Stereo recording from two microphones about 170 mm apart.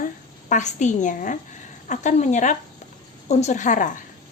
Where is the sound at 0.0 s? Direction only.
45° left (ahead or behind).